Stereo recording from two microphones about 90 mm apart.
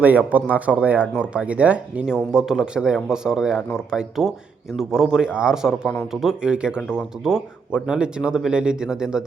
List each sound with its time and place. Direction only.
0.0 s speech: 15° right (ahead or behind)
5.8 s speech: 25° left (ahead or behind)
6.1 s speech: 5° right (ahead or behind)